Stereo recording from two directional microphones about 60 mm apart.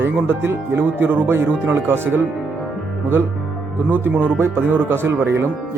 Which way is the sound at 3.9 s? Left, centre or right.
Right.